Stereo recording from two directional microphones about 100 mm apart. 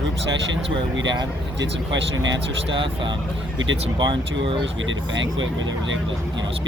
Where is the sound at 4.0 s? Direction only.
50° right (ahead or behind).